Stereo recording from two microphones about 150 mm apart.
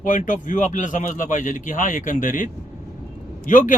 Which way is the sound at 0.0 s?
60° left (ahead or behind).